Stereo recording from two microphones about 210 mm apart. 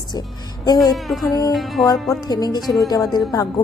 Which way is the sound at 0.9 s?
Centre (ahead or behind).